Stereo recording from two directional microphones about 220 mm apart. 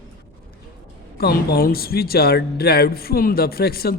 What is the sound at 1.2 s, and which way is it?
Speech, 45° left (ahead or behind).